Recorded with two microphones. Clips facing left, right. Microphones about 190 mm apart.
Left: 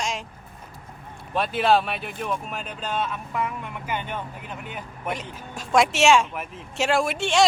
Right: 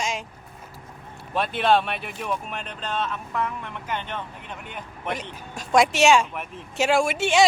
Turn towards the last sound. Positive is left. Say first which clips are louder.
# right 2 dB
turn(degrees=-5)  # may be behind; listen again after turning